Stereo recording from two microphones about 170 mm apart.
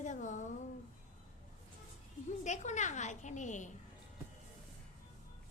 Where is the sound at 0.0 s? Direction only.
45° left (ahead or behind).